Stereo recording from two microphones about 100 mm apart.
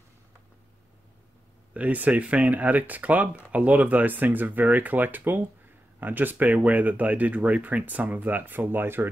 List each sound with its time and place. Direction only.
1.7 s speech: 15° right (ahead or behind)